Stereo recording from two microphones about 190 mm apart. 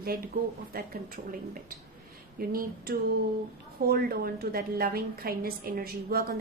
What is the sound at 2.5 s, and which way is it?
A woman's voice, 50° right (ahead or behind).